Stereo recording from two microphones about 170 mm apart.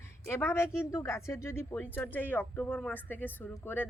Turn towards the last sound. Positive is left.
turn(degrees=10)  # may be behind; listen again after turning